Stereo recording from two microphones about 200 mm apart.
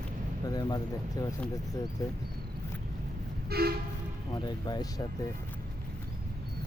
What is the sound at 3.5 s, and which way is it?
Train, 50° right (ahead or behind).